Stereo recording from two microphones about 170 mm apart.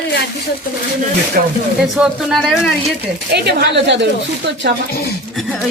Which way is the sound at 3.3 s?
90° right.